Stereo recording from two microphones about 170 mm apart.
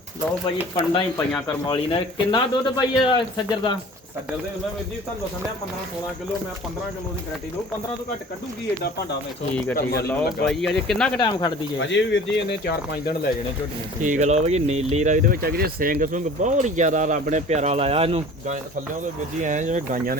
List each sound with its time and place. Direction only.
1.3 s speech: 10° left (ahead or behind)
1.6 s speech: 25° left (ahead or behind)
9.7 s speech: 70° left (ahead or behind)
10.1 s speech: 5° left (ahead or behind)
11.2 s speech: 25° left (ahead or behind)
11.9 s speech: 90° left
14.0 s speech: 45° right (ahead or behind)